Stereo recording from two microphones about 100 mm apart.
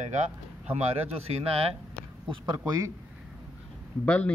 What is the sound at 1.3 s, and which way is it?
Speech, 75° right (ahead or behind).